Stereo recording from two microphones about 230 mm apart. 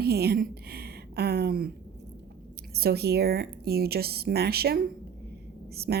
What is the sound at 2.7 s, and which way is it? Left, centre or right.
A woman's voice, right.